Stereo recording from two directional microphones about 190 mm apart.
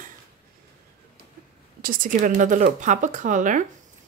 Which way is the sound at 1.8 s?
50° right (ahead or behind).